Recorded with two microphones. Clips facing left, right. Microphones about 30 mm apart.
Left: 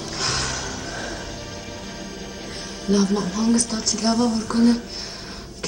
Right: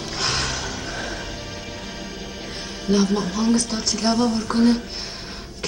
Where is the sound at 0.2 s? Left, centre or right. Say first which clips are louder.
Right 1 dB; centre.